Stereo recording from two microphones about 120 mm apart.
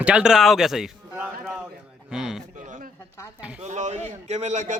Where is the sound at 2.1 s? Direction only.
5° right (ahead or behind).